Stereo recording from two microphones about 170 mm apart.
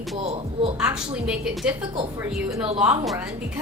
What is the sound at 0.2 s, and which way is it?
Speech, 35° right (ahead or behind).